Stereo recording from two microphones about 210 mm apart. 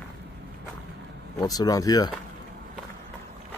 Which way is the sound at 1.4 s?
15° left (ahead or behind).